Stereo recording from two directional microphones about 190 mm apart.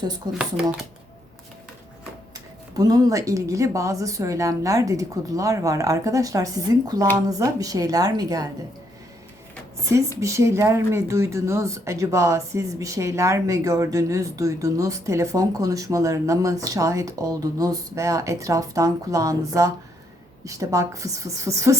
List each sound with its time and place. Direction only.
0.3 s speech: 5° right (ahead or behind)
2.7 s a woman's voice: 20° right (ahead or behind)
10.2 s speech: 15° right (ahead or behind)